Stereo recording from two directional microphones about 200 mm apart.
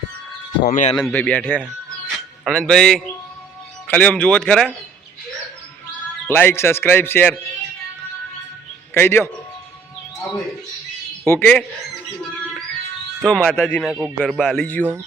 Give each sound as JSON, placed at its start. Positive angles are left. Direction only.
{"t": 0.6, "sound": "speech", "side_deg": 40}
{"t": 0.9, "sound": "speech", "side_deg": 5}
{"t": 2.0, "sound": "music", "side_deg": 0}
{"t": 3.8, "sound": "speech", "side_deg": 5}
{"t": 6.2, "sound": "speech", "side_deg": 10}
{"t": 9.0, "sound": "speech", "side_deg": 10}
{"t": 11.3, "sound": "speech", "side_deg": 10}
{"t": 13.2, "sound": "speech", "side_deg": 5}